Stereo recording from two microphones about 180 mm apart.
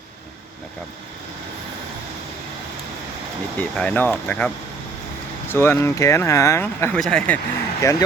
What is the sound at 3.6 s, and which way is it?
Speech, 10° left (ahead or behind).